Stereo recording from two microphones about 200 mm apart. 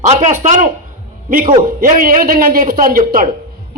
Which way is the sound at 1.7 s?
45° right (ahead or behind).